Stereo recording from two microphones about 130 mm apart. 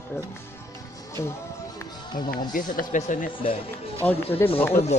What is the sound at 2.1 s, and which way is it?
Speech, 90° left.